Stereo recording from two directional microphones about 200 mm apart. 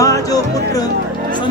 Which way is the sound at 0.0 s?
15° left (ahead or behind).